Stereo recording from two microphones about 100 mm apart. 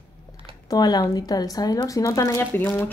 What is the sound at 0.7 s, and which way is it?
Speech, 40° left (ahead or behind).